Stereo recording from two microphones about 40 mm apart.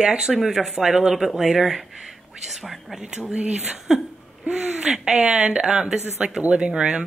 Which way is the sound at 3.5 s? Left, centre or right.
Centre.